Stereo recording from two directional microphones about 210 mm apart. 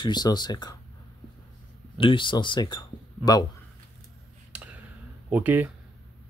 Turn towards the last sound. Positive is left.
turn(degrees=-10)  # may be behind; listen again after turning